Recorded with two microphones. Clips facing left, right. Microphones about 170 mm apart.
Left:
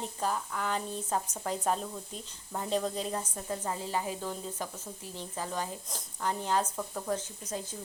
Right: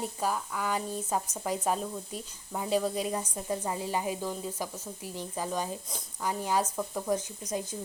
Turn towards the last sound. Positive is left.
turn(degrees=-15)  # may be behind; listen again after turning